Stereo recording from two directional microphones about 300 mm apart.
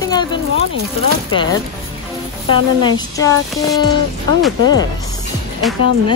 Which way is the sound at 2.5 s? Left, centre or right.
Centre.